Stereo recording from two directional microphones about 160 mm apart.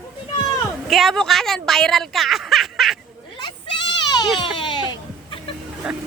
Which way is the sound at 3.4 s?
30° left (ahead or behind).